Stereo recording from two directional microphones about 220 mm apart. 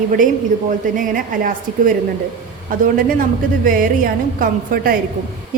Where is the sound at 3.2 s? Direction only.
40° right (ahead or behind).